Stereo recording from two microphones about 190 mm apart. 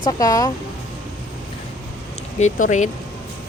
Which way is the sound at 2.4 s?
40° left (ahead or behind).